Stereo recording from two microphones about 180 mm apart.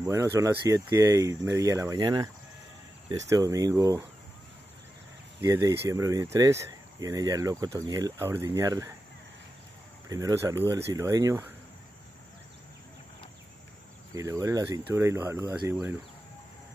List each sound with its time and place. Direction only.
0.0 s speech: 15° right (ahead or behind)
5.4 s speech: 20° right (ahead or behind)
10.0 s speech: 20° right (ahead or behind)
14.1 s speech: 20° right (ahead or behind)